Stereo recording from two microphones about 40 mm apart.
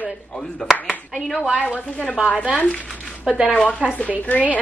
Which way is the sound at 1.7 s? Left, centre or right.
Left.